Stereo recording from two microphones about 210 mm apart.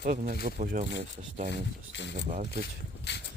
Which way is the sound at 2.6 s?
55° left (ahead or behind).